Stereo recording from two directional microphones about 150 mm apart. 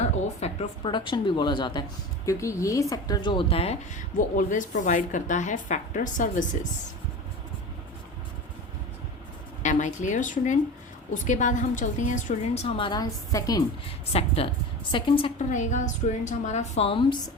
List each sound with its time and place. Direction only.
0.0 s a woman's voice: 45° left (ahead or behind)
3.9 s a woman's voice: 60° left (ahead or behind)
9.6 s a woman's voice: 55° left (ahead or behind)
12.6 s a woman's voice: 35° left (ahead or behind)
14.1 s speech: 40° left (ahead or behind)
15.4 s a woman's voice: 55° left (ahead or behind); by 17.3 s 30° left (ahead or behind)